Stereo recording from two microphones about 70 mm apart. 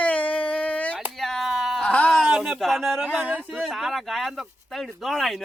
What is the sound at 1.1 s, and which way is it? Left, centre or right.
Speech, centre.